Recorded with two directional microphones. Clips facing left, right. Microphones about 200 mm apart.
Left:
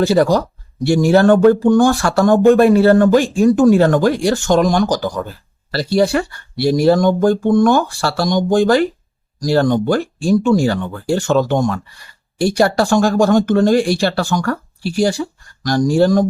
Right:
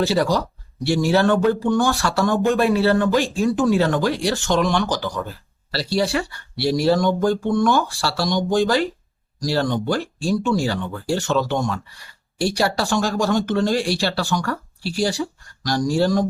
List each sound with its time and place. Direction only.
0.2 s speech: 45° left (ahead or behind)